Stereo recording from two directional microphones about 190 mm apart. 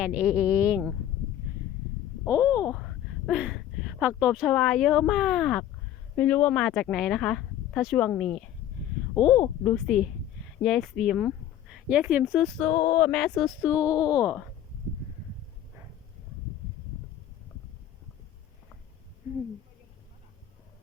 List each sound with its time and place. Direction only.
0.0 s speech: 5° right (ahead or behind)
2.3 s speech: 5° right (ahead or behind)
9.6 s speech: centre (ahead or behind)